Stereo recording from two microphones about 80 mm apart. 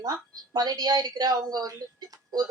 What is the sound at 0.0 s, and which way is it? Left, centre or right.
Speech, right.